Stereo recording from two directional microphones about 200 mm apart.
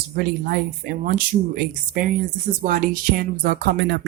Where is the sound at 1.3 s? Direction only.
35° right (ahead or behind).